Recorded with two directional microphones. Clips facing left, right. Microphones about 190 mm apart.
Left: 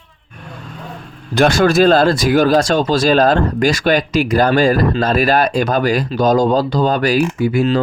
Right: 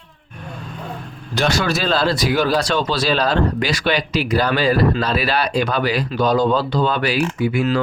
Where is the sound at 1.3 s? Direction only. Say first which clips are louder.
Left 7 dB; 50° left (ahead or behind).